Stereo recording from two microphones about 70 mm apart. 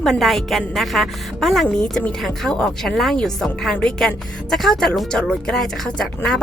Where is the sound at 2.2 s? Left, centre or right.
Centre.